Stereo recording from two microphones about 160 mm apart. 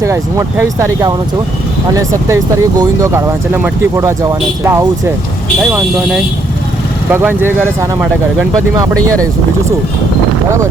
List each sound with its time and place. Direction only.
0.0 s speech: 20° right (ahead or behind)
5.7 s speech: 5° right (ahead or behind)